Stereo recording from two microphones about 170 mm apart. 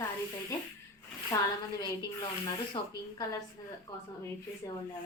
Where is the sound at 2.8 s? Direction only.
25° left (ahead or behind).